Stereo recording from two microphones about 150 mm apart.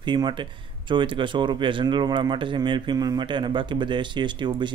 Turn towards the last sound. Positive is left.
turn(degrees=-30)  # may be behind; listen again after turning